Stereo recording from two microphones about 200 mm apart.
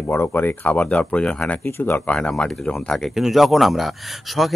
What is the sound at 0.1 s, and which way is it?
Speech, 10° left (ahead or behind).